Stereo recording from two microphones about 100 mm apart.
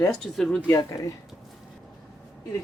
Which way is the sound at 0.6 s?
25° left (ahead or behind).